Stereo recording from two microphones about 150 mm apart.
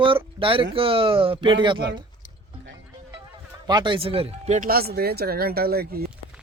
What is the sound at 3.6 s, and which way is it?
Speech, 30° right (ahead or behind).